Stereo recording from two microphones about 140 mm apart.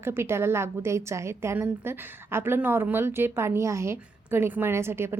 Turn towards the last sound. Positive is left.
turn(degrees=-15)  # may be behind; listen again after turning